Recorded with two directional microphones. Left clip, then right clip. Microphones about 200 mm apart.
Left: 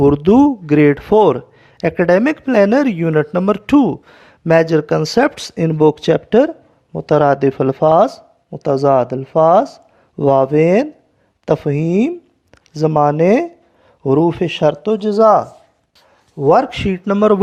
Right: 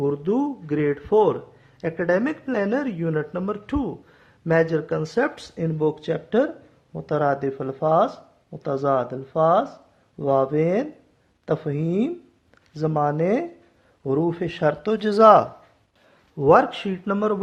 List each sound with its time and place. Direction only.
0.0 s speech: 45° left (ahead or behind); by 15.4 s 25° left (ahead or behind)
16.4 s speech: 25° left (ahead or behind); by 17.4 s 40° left (ahead or behind)